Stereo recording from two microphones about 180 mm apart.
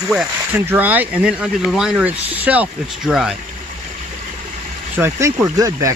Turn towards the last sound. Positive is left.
turn(degrees=-20)  # may be behind; listen again after turning